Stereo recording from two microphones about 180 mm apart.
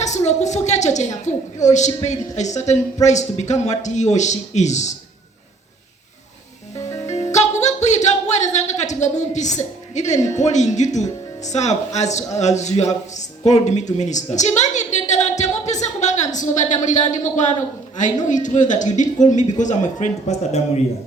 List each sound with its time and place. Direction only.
0.0 s a woman's voice: 40° left (ahead or behind)
7.3 s a sound: 40° left (ahead or behind)
10.3 s a woman's voice: 40° left (ahead or behind)